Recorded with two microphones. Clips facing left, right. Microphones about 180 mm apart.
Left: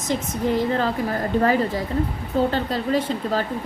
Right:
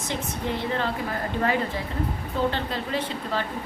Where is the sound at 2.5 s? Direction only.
40° left (ahead or behind).